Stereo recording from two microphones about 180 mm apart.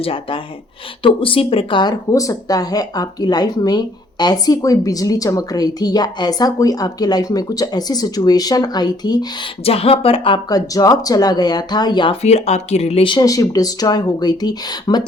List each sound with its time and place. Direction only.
0.0 s speech: 30° left (ahead or behind)